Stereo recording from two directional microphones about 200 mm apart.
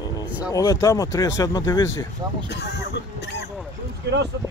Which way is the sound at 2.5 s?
60° left (ahead or behind).